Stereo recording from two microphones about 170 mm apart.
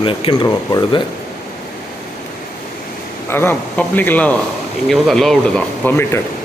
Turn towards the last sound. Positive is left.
turn(degrees=5)  # may be behind; listen again after turning